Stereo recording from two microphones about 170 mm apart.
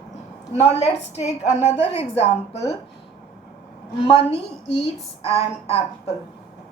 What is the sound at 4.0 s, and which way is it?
A woman's voice, 35° left (ahead or behind).